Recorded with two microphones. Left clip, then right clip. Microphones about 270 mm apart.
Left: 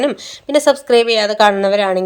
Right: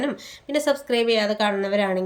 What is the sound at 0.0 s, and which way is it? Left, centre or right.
Speech, centre.